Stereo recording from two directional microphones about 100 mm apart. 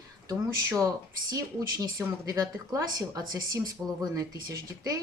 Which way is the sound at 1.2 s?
35° right (ahead or behind).